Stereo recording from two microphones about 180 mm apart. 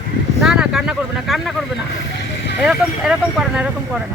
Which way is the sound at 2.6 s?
5° right (ahead or behind).